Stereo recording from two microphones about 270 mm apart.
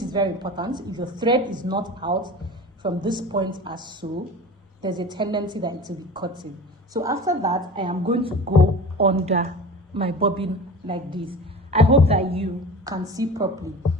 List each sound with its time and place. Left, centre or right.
0.0 s a woman's voice: centre